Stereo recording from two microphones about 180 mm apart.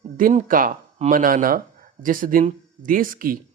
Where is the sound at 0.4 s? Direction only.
50° right (ahead or behind).